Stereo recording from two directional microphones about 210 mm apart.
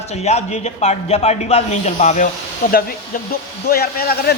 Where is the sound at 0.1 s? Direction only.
30° left (ahead or behind).